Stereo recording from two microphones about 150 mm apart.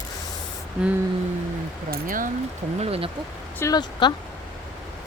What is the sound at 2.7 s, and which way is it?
Speech, 40° right (ahead or behind).